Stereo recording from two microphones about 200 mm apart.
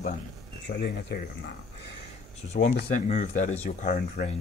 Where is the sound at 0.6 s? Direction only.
55° left (ahead or behind).